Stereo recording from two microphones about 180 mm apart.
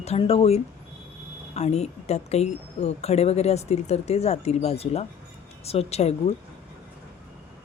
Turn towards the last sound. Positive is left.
turn(degrees=35)  # may be behind; listen again after turning